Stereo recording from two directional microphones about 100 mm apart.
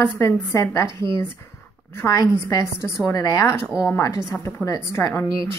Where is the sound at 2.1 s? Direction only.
35° left (ahead or behind).